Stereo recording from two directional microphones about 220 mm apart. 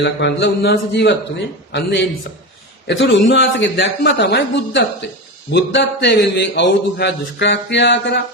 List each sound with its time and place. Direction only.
0.0 s a man's voice: 50° left (ahead or behind)